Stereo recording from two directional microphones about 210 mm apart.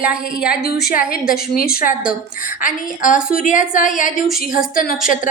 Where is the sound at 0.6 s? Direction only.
50° left (ahead or behind).